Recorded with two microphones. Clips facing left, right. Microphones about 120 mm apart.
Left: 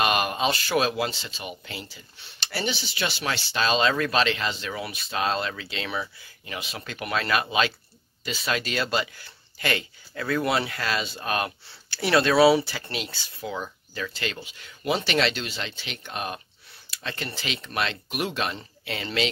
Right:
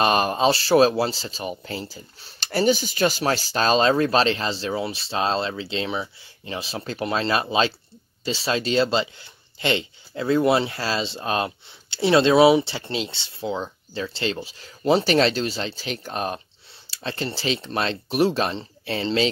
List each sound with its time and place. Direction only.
0.0 s speech: 35° right (ahead or behind)